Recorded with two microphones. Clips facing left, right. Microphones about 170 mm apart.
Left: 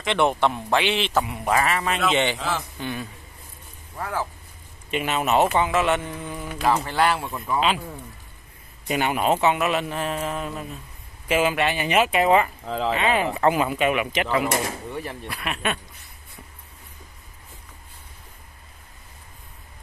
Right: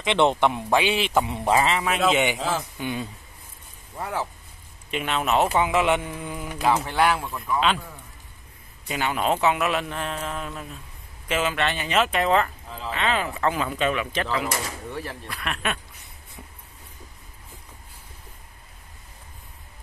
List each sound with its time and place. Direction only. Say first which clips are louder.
0.0 s speech: right 1 dB; 20° right (ahead or behind)
1.2 s speech: right 1 dB; 25° right (ahead or behind)
2.0 s speech: right 1 dB; 10° right (ahead or behind)
4.9 s speech: left 2 dB; 5° left (ahead or behind)
5.6 s speech: even; 15° right (ahead or behind)
6.6 s speech: even; centre (ahead or behind)
8.8 s speech: left 3 dB; 20° left (ahead or behind)
9.2 s speech: even; centre (ahead or behind)
12.6 s speech: left 9 dB; 90° left
12.9 s speech: left 1 dB; 10° left (ahead or behind)